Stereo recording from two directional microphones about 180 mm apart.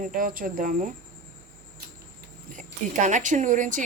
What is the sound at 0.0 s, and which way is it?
Speech, 50° right (ahead or behind).